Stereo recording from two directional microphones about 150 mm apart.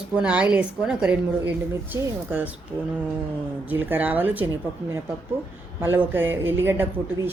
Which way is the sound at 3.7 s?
10° right (ahead or behind).